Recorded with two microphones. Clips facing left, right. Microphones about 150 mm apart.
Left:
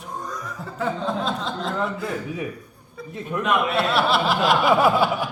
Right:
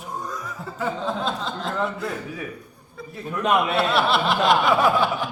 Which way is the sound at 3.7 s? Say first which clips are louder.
Even; centre (ahead or behind).